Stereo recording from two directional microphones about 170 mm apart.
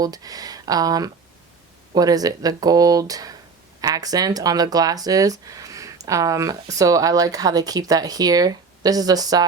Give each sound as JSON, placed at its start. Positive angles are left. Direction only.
{"t": 0.0, "sound": "speech", "side_deg": -20}